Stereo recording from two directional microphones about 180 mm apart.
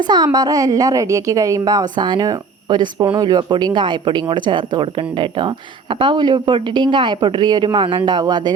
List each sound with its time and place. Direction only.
0.1 s speech: 25° right (ahead or behind)